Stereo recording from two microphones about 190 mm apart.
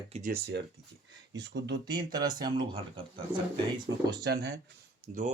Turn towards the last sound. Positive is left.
turn(degrees=-45)  # may be behind; listen again after turning